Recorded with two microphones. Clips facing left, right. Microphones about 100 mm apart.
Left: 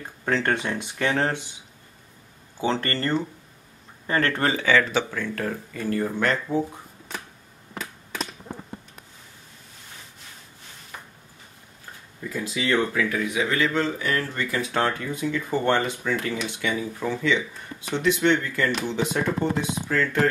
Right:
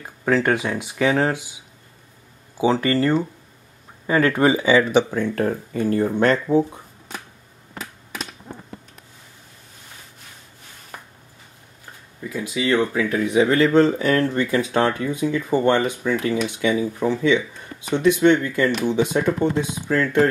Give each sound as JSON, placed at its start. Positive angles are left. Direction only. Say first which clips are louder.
{"t": 0.0, "sound": "speech", "louder": "right 5 dB", "side_deg": -5}
{"t": 5.3, "sound": "speech", "louder": "right 7 dB", "side_deg": -35}
{"t": 12.2, "sound": "speech", "louder": "right 3 dB", "side_deg": -10}
{"t": 13.1, "sound": "speech", "louder": "right 7 dB", "side_deg": -30}
{"t": 14.2, "sound": "speech", "louder": "right 7 dB", "side_deg": -25}